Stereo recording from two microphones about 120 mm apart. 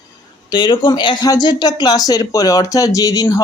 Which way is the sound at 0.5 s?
40° left (ahead or behind).